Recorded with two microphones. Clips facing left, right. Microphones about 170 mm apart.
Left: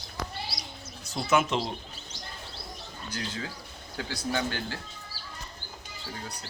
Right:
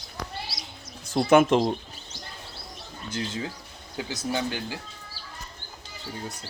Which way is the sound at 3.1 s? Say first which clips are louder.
Right 5 dB; 25° right (ahead or behind).